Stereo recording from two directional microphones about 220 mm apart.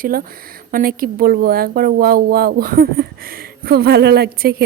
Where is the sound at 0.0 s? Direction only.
40° right (ahead or behind).